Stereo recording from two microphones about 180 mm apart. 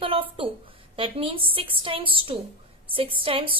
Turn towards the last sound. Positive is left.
turn(degrees=-30)  # may be behind; listen again after turning